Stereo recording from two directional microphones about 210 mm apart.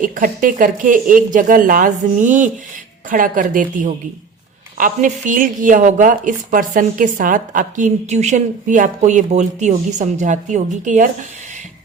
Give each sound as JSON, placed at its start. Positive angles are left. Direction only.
{"t": 0.0, "sound": "a woman's voice", "side_deg": -40}